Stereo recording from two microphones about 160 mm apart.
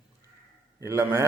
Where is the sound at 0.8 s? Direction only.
15° right (ahead or behind).